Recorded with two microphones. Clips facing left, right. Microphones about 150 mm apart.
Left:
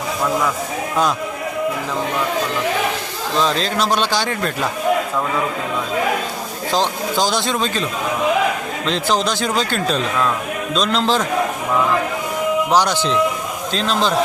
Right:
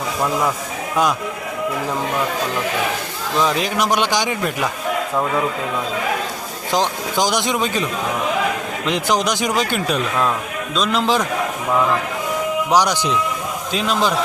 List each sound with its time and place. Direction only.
3.4 s a man's voice: 15° right (ahead or behind)
6.7 s a man's voice: 15° right (ahead or behind)
8.9 s a man's voice: 15° right (ahead or behind)
12.7 s a man's voice: 15° right (ahead or behind)